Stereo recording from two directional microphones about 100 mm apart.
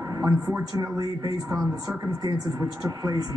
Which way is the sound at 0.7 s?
40° right (ahead or behind).